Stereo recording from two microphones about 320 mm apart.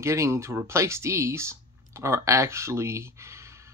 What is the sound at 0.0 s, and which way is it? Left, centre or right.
Speech, centre.